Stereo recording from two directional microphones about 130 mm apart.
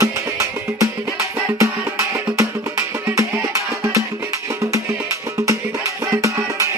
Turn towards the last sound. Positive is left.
turn(degrees=-25)  # may be behind; listen again after turning